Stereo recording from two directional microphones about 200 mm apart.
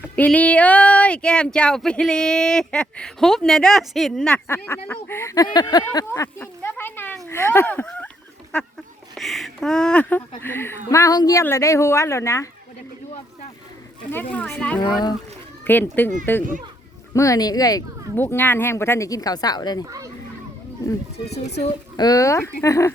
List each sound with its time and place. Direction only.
0.2 s speech: 5° left (ahead or behind)
9.1 s speech: centre (ahead or behind)
14.1 s speech: 10° left (ahead or behind)
17.2 s speech: 15° left (ahead or behind)
21.9 s speech: 20° left (ahead or behind)